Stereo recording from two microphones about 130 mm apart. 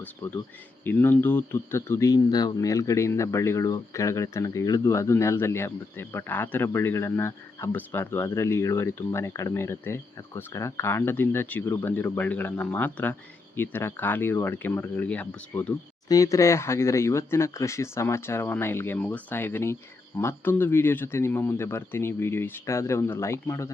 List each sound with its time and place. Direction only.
0.9 s speech: 15° left (ahead or behind)
16.0 s speech: 25° left (ahead or behind)